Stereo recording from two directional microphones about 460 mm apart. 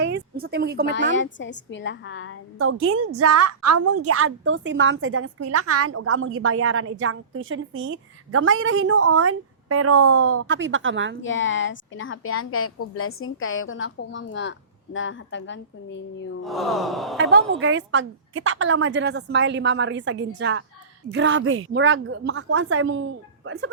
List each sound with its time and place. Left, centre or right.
0.0 s a sound: right
1.1 s a woman's voice: left
2.6 s a woman's voice: right
11.2 s a woman's voice: left
16.4 s gasp: centre
17.2 s a woman's voice: right